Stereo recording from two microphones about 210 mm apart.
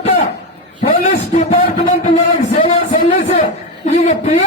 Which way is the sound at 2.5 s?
25° left (ahead or behind).